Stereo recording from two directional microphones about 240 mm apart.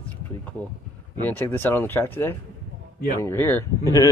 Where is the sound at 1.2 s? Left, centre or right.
Centre.